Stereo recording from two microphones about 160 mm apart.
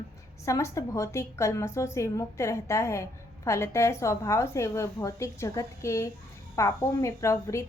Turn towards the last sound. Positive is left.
turn(degrees=20)  # may be behind; listen again after turning